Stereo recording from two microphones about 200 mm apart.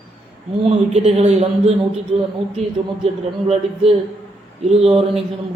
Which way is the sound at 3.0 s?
30° right (ahead or behind).